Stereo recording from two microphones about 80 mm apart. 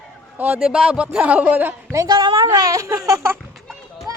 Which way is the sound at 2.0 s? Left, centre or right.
Right.